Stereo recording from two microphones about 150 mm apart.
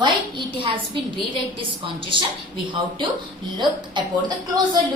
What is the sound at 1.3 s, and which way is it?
Speech, 35° right (ahead or behind).